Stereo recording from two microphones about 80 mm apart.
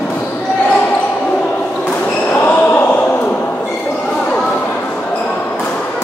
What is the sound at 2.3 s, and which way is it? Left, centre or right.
Basketball bounce, left.